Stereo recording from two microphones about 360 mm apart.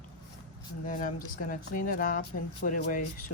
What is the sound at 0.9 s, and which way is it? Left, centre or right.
Speech, left.